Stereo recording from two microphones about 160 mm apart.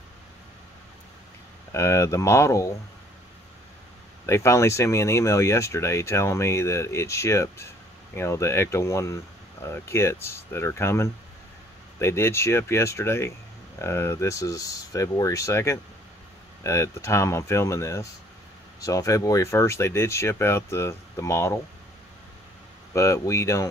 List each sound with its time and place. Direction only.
1.7 s speech: 20° left (ahead or behind)
4.3 s speech: 15° left (ahead or behind)
22.9 s speech: 20° left (ahead or behind)